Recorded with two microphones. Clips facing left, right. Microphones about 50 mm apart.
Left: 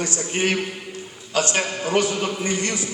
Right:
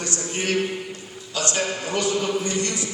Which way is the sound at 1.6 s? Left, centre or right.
Left.